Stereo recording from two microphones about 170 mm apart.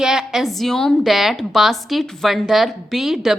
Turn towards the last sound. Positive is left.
turn(degrees=0)  # may be behind; listen again after turning